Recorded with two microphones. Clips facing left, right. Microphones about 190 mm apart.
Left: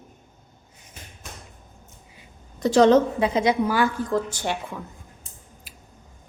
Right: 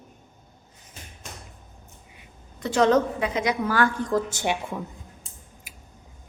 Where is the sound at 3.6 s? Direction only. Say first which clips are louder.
Left 1 dB; 10° left (ahead or behind).